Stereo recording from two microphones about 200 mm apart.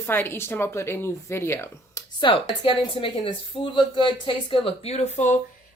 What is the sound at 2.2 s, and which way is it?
A woman's voice, 25° left (ahead or behind).